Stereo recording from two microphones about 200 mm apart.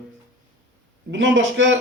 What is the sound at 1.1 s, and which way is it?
Speech, 70° right (ahead or behind).